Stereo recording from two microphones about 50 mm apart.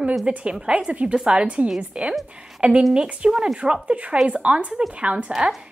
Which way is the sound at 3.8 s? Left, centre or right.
Right.